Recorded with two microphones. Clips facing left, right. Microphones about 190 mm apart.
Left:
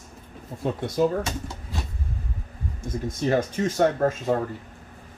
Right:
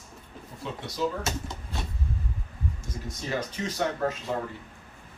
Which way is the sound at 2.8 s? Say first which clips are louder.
Left 16 dB; 50° left (ahead or behind).